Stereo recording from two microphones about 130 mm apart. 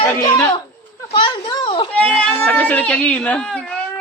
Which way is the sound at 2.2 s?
10° left (ahead or behind).